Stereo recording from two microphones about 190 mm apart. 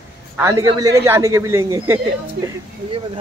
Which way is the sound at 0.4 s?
15° right (ahead or behind).